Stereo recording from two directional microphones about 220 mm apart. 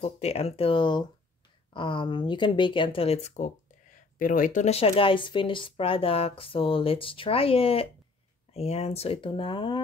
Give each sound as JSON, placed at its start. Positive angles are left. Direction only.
{"t": 0.0, "sound": "speech", "side_deg": 30}